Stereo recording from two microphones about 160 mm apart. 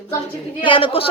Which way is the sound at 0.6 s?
30° left (ahead or behind).